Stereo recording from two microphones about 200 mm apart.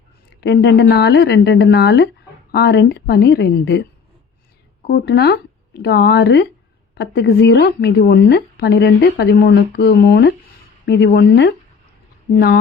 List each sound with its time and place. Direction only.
0.4 s a woman's voice: 60° left (ahead or behind)
4.9 s a woman's voice: 55° left (ahead or behind)